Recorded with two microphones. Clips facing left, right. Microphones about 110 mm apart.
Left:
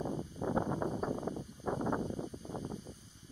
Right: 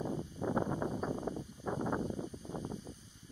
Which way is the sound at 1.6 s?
45° left (ahead or behind).